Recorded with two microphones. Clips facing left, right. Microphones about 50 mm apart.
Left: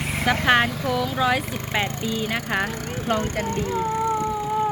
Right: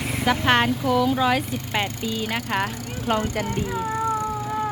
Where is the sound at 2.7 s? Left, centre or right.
Left.